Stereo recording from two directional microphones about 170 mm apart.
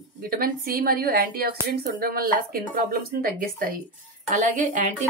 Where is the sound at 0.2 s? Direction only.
60° right (ahead or behind).